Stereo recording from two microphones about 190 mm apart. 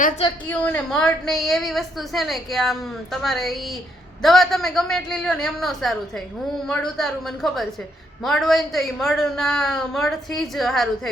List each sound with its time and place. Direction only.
0.2 s a woman's voice: 30° left (ahead or behind)
0.5 s a woman's voice: 5° left (ahead or behind)